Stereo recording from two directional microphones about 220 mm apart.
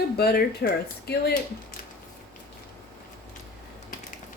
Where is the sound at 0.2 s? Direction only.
45° left (ahead or behind).